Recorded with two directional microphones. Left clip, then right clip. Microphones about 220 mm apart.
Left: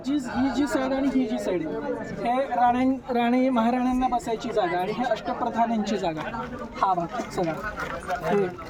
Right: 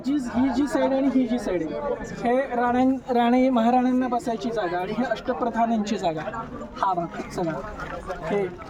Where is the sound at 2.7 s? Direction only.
10° right (ahead or behind).